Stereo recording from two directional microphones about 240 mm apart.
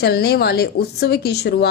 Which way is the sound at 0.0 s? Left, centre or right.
Left.